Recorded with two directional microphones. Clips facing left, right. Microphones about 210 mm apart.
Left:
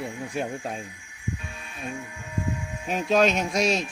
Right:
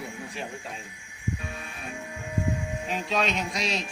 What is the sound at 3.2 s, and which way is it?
Speech, 45° left (ahead or behind).